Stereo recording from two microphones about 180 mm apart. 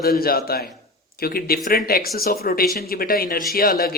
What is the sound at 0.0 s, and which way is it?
Speech, 55° left (ahead or behind).